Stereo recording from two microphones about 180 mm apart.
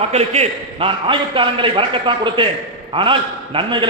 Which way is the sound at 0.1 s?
35° right (ahead or behind).